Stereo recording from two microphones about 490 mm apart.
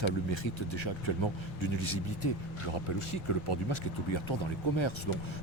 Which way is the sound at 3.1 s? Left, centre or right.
Left.